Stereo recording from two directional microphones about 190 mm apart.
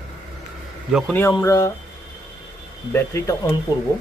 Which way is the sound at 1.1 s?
15° left (ahead or behind).